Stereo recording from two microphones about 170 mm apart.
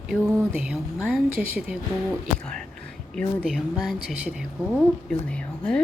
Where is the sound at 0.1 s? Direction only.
5° right (ahead or behind).